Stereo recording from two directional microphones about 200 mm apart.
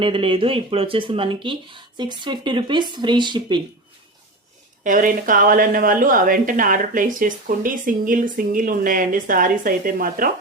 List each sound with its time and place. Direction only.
0.0 s speech: 25° right (ahead or behind)
4.8 s a woman's voice: 40° right (ahead or behind)